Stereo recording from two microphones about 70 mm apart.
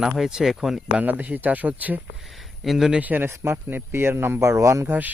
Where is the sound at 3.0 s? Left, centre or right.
Right.